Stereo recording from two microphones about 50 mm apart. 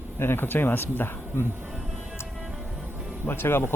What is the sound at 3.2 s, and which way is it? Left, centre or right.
Speech, left.